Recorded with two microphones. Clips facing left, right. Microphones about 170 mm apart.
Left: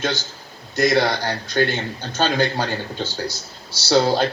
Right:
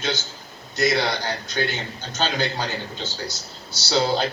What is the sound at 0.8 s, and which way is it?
A man's voice, 50° left (ahead or behind).